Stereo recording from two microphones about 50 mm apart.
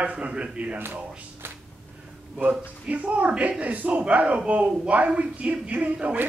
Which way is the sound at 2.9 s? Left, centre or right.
Right.